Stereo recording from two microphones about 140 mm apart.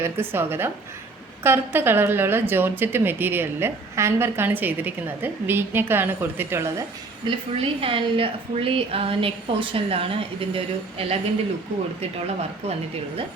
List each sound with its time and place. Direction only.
0.0 s a woman's voice: 15° right (ahead or behind)
7.3 s a woman's voice: 40° right (ahead or behind)